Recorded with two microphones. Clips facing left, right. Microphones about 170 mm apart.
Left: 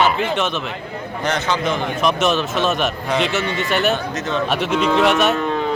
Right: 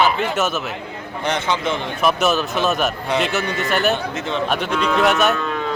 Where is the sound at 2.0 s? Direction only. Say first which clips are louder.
Right 1 dB; 5° right (ahead or behind).